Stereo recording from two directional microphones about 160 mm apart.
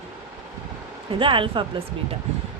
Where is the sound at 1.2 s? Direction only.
30° right (ahead or behind).